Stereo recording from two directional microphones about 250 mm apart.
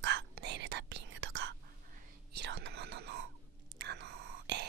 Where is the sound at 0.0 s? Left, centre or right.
Right.